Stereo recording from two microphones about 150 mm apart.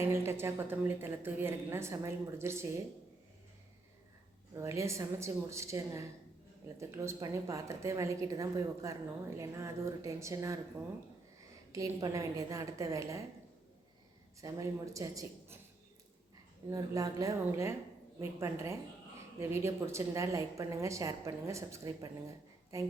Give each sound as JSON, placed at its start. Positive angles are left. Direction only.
{"t": 0.0, "sound": "a woman's voice", "side_deg": -15}
{"t": 4.5, "sound": "a woman's voice", "side_deg": -20}
{"t": 11.7, "sound": "a woman's voice", "side_deg": -25}
{"t": 14.4, "sound": "a woman's voice", "side_deg": -20}
{"t": 16.6, "sound": "a woman's voice", "side_deg": -20}